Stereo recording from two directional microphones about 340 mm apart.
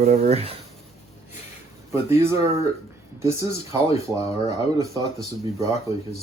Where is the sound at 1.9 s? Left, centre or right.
Centre.